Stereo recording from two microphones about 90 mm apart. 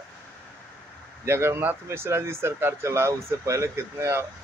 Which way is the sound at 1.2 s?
25° right (ahead or behind).